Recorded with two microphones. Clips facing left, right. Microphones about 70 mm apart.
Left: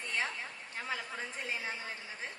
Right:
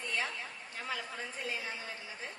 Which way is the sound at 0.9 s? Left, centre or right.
Left.